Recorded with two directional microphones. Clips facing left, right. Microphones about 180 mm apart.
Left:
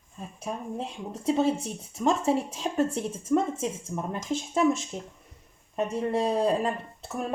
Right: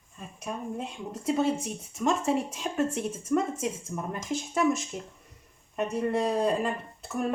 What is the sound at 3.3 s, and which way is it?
Speech, 20° left (ahead or behind).